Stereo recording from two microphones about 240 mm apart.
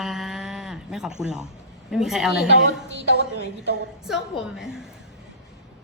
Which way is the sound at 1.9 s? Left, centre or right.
Centre.